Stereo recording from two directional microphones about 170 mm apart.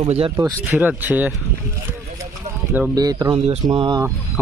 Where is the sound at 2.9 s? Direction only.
25° right (ahead or behind).